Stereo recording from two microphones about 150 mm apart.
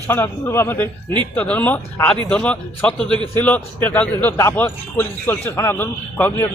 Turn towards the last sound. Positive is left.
turn(degrees=15)  # may be behind; listen again after turning